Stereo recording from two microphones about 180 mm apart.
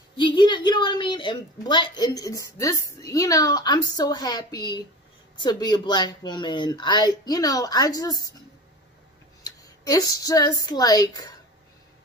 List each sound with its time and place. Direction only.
0.2 s a woman's voice: 25° left (ahead or behind)
9.4 s speech: 20° left (ahead or behind)